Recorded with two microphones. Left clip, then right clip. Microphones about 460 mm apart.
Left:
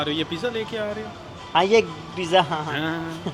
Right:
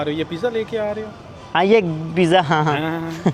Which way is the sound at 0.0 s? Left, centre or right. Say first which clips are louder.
Right 3 dB; right.